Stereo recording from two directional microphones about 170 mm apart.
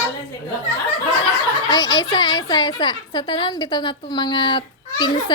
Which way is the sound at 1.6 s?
25° left (ahead or behind).